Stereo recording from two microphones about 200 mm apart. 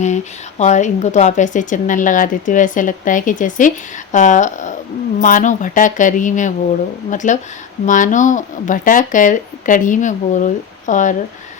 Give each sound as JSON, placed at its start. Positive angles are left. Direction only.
{"t": 0.6, "sound": "speech", "side_deg": 35}